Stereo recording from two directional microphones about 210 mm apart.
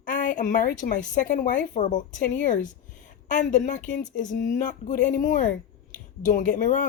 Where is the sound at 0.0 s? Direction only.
40° left (ahead or behind).